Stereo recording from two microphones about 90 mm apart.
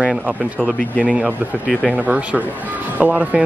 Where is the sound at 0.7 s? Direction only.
15° left (ahead or behind).